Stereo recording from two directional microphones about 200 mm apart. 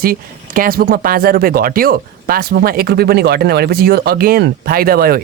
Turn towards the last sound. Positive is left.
turn(degrees=-50)  # may be behind; listen again after turning